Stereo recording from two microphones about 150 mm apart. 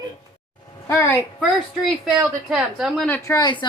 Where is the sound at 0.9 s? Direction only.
15° left (ahead or behind).